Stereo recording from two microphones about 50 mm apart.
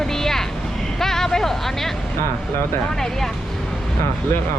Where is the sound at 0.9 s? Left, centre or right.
Centre.